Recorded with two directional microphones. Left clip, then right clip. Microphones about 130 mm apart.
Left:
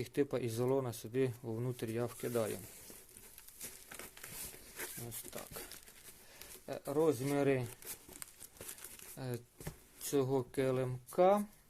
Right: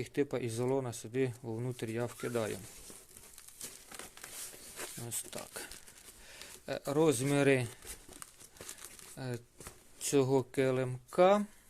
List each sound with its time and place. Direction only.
0.0 s speech: 10° right (ahead or behind)
5.0 s speech: 30° right (ahead or behind)
6.7 s speech: 45° right (ahead or behind)
6.9 s speech: 55° right (ahead or behind)
9.1 s speech: 20° right (ahead or behind)
10.0 s speech: 40° right (ahead or behind)